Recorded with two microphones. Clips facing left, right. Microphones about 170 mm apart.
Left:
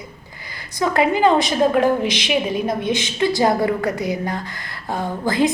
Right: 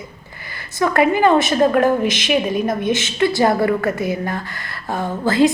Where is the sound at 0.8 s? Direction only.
15° left (ahead or behind).